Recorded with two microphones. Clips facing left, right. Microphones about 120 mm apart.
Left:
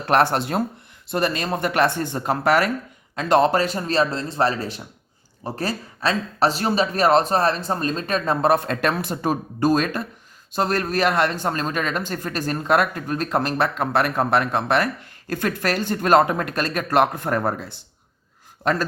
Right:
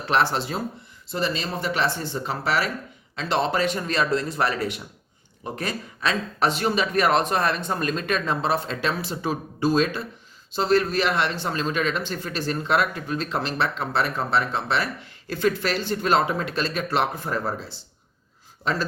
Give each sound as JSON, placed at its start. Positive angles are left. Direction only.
{"t": 0.0, "sound": "speech", "side_deg": 50}